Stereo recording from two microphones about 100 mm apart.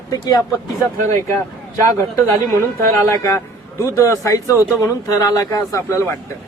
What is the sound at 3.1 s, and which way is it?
A man's voice, 30° left (ahead or behind).